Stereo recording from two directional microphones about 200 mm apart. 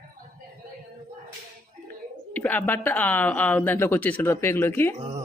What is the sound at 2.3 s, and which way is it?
Speech, 10° left (ahead or behind).